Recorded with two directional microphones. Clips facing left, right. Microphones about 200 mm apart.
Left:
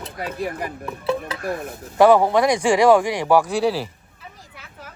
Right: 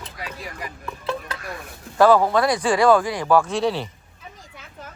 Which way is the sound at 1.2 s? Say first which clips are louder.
Left 7 dB; 55° left (ahead or behind).